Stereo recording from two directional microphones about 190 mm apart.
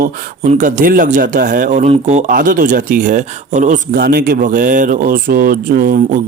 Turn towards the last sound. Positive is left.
turn(degrees=-45)  # may be behind; listen again after turning